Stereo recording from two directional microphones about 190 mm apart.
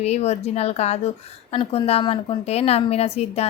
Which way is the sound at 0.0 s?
35° left (ahead or behind).